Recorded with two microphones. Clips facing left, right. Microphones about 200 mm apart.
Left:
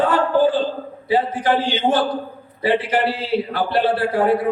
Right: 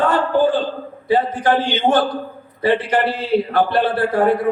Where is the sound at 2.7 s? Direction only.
50° right (ahead or behind).